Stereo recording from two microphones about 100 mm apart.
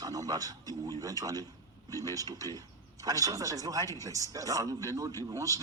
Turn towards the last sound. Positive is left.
turn(degrees=-35)  # may be behind; listen again after turning